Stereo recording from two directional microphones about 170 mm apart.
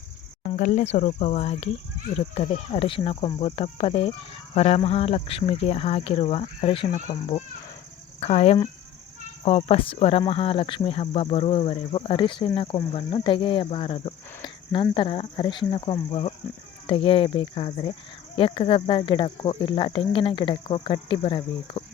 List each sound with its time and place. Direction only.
0.4 s speech: 45° left (ahead or behind)
8.2 s speech: 35° left (ahead or behind)